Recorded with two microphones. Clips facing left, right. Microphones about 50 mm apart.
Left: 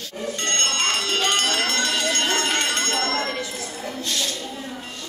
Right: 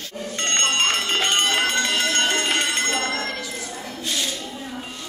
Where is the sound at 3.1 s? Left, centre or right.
Left.